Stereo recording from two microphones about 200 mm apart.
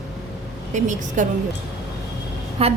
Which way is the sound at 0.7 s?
40° right (ahead or behind).